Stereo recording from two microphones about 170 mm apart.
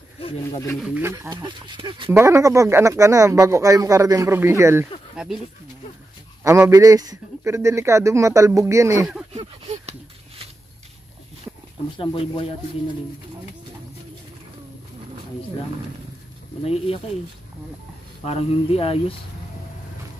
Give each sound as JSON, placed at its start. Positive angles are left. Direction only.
{"t": 0.7, "sound": "speech", "side_deg": -5}
{"t": 1.0, "sound": "speech", "side_deg": -15}
{"t": 1.3, "sound": "speech", "side_deg": -25}
{"t": 2.0, "sound": "speech", "side_deg": -15}
{"t": 5.1, "sound": "speech", "side_deg": -5}
{"t": 6.4, "sound": "speech", "side_deg": -15}
{"t": 9.3, "sound": "a sound", "side_deg": -40}
{"t": 12.0, "sound": "speech", "side_deg": 30}
{"t": 16.6, "sound": "speech", "side_deg": 35}
{"t": 18.2, "sound": "speech", "side_deg": 35}